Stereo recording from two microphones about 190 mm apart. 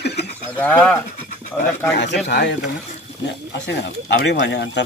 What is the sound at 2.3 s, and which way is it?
Speech, 55° left (ahead or behind).